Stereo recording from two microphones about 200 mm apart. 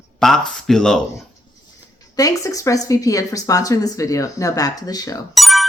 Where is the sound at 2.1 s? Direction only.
15° left (ahead or behind).